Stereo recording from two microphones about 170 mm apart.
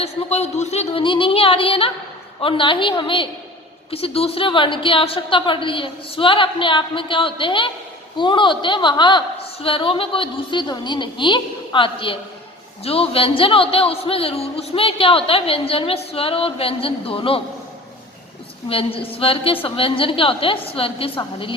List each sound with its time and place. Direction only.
0.0 s a woman's voice: 40° left (ahead or behind)
18.7 s a woman's voice: 35° left (ahead or behind)